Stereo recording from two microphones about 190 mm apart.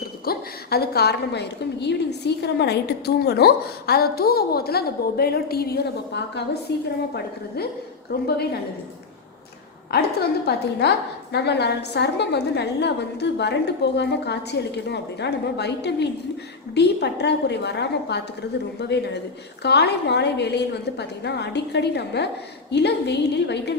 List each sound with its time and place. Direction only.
0.3 s a woman's voice: 55° left (ahead or behind)
10.4 s a woman's voice: 60° left (ahead or behind)